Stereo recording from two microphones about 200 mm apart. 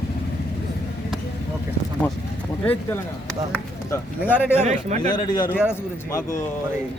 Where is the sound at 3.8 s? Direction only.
10° left (ahead or behind).